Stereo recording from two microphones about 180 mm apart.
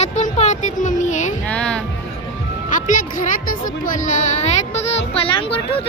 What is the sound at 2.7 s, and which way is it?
Speech, 45° left (ahead or behind).